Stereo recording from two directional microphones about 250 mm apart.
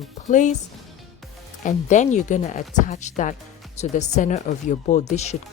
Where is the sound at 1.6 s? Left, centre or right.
Left.